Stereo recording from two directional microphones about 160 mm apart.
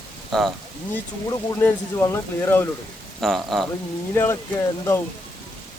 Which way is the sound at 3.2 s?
Centre (ahead or behind).